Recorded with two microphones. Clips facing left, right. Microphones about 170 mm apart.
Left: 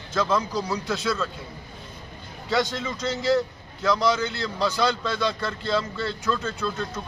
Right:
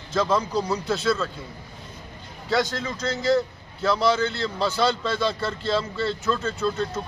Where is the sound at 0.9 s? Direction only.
Centre (ahead or behind).